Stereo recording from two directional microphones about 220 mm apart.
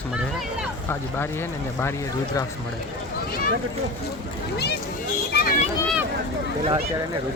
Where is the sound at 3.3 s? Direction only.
40° left (ahead or behind).